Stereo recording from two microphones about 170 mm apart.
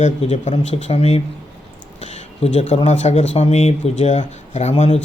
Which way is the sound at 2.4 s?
40° left (ahead or behind).